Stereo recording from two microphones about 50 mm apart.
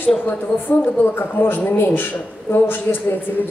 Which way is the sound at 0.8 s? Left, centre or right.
Left.